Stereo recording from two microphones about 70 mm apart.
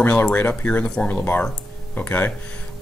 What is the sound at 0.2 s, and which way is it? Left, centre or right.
Speech, left.